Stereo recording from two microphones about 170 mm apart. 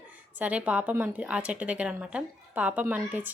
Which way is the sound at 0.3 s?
10° right (ahead or behind).